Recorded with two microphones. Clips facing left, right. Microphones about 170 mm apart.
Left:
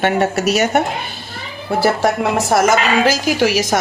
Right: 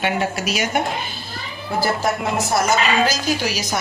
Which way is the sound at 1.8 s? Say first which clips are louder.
Left 5 dB; 75° left (ahead or behind).